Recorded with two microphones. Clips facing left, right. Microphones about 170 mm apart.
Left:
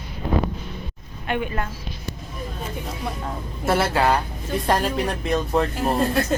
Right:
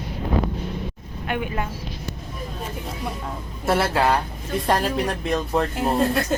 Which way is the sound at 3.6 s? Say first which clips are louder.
Even; centre (ahead or behind).